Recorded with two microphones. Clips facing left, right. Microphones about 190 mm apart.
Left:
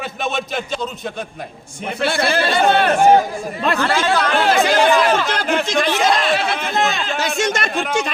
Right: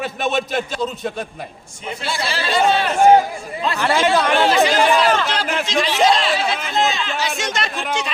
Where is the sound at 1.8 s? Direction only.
60° left (ahead or behind).